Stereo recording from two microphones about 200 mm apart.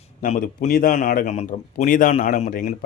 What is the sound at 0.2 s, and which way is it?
A man's voice, 40° left (ahead or behind).